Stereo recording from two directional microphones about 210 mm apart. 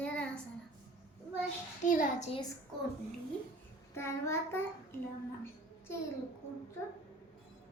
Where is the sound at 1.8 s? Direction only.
40° left (ahead or behind).